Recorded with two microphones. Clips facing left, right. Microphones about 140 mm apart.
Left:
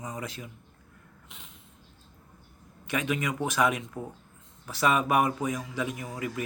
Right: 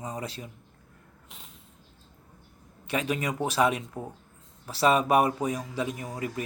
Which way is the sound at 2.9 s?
35° right (ahead or behind).